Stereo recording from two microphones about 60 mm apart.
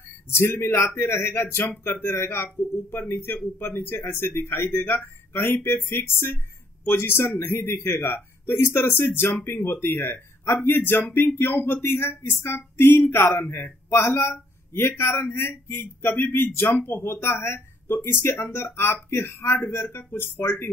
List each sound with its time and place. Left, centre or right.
0.3 s speech: left